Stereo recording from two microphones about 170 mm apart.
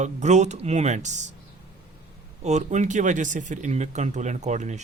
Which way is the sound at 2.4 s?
45° right (ahead or behind).